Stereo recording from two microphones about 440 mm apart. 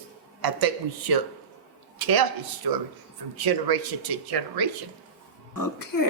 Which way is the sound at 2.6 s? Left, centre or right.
Right.